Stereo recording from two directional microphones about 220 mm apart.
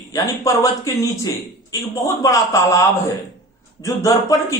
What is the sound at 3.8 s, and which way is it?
Speech, 15° left (ahead or behind).